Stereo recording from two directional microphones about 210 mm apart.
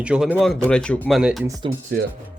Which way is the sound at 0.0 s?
5° right (ahead or behind).